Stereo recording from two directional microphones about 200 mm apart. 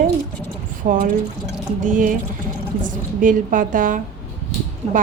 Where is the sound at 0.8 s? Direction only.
40° right (ahead or behind).